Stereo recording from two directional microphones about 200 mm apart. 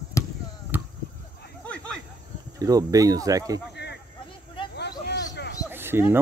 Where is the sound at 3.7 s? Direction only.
55° left (ahead or behind).